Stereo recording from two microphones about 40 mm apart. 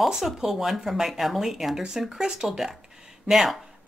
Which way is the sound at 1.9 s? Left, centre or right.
Centre.